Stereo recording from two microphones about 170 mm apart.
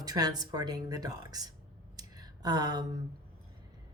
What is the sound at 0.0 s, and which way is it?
Speech, 20° right (ahead or behind).